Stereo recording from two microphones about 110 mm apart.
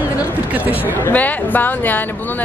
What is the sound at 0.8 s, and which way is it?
Speech, 15° left (ahead or behind).